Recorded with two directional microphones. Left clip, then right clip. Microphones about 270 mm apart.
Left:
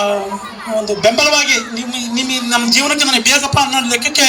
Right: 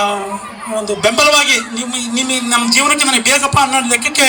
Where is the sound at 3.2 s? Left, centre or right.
Centre.